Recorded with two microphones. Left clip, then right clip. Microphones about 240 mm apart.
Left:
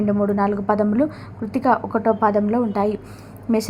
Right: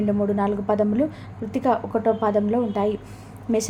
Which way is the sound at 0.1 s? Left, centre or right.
Centre.